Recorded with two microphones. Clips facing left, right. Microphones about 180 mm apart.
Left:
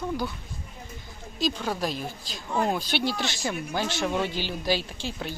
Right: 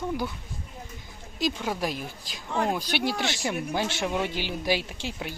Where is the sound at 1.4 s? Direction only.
15° right (ahead or behind).